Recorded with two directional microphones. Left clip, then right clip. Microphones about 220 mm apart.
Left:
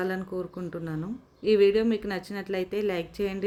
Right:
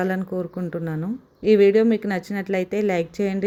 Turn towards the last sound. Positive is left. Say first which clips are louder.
# right 7 dB
turn(degrees=-15)  # may be behind; listen again after turning